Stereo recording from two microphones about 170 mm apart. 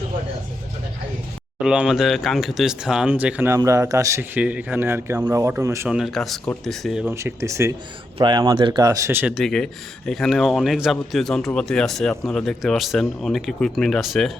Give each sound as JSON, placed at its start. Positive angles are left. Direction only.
{"t": 1.5, "sound": "speech", "side_deg": -5}
{"t": 5.9, "sound": "speech", "side_deg": 0}
{"t": 7.1, "sound": "speech", "side_deg": -15}